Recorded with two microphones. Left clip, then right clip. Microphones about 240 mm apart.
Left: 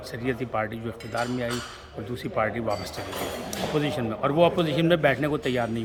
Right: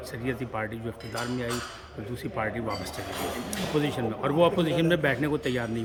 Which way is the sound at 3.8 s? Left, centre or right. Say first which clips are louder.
Left 1 dB; centre.